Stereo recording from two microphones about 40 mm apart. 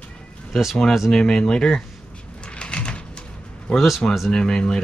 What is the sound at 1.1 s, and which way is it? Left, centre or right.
Speech, centre.